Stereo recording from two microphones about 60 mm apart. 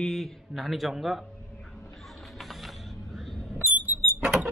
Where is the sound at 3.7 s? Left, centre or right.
Right.